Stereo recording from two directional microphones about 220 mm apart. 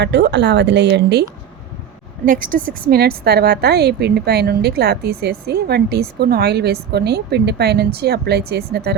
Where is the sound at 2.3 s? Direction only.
40° right (ahead or behind).